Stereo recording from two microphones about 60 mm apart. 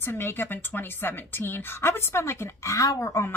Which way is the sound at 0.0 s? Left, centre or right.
Left.